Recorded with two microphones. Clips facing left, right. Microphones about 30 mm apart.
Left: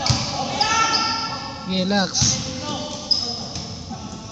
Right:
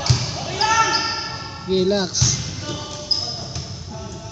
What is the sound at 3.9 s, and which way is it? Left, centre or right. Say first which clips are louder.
Music: left 1 dB; left.